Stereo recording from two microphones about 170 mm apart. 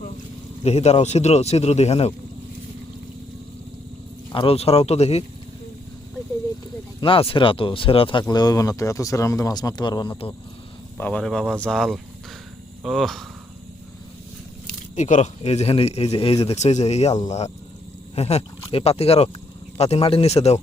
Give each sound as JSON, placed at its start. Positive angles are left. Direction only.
{"t": 0.6, "sound": "a man's voice", "side_deg": 40}
{"t": 4.3, "sound": "a man's voice", "side_deg": 35}
{"t": 7.0, "sound": "speech", "side_deg": 30}
{"t": 10.9, "sound": "speech", "side_deg": 10}
{"t": 14.9, "sound": "a man's voice", "side_deg": 45}